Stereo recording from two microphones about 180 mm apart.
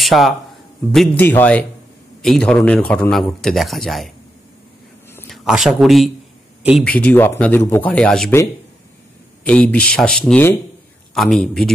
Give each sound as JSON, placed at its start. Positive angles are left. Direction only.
{"t": 0.0, "sound": "a man's voice", "side_deg": 0}
{"t": 5.3, "sound": "speech", "side_deg": 0}
{"t": 9.4, "sound": "a man's voice", "side_deg": 10}